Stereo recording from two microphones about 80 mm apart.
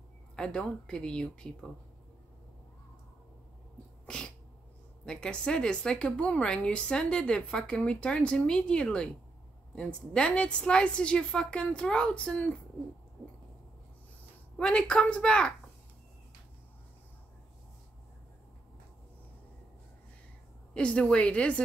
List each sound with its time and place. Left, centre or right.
0.4 s a woman's voice: centre
4.0 s sneeze: centre
5.0 s a woman's voice: centre
14.6 s a woman's voice: centre
20.7 s a woman's voice: centre